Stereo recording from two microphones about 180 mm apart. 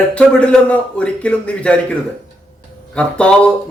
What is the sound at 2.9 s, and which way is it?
Speech, 5° left (ahead or behind).